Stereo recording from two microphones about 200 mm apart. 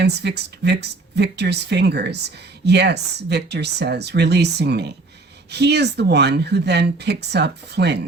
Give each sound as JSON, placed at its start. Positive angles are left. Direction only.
{"t": 0.0, "sound": "speech", "side_deg": -55}